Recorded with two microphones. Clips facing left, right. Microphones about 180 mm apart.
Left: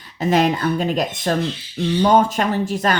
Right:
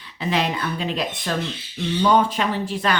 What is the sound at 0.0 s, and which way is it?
Speech, 45° left (ahead or behind).